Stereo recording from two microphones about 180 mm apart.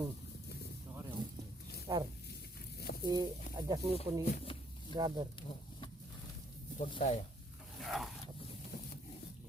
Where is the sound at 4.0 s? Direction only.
30° left (ahead or behind).